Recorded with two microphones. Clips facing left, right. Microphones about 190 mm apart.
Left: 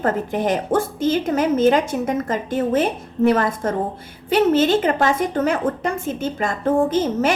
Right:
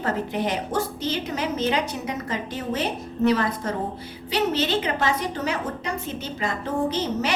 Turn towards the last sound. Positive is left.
turn(degrees=50)  # may be behind; listen again after turning